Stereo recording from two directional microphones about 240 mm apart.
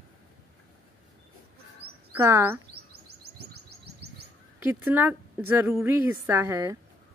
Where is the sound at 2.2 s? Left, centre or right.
Centre.